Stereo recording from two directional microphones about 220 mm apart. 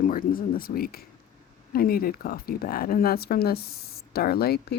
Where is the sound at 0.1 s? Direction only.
40° left (ahead or behind).